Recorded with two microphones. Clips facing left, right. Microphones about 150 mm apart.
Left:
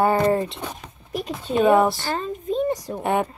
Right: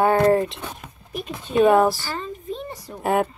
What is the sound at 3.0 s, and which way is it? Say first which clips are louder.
Speech: right 3 dB; centre (ahead or behind).